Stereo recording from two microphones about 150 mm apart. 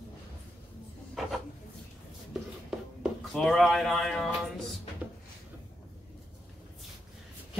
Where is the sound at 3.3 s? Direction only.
5° left (ahead or behind).